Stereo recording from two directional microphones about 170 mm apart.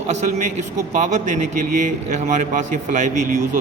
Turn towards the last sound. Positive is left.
turn(degrees=-50)  # may be behind; listen again after turning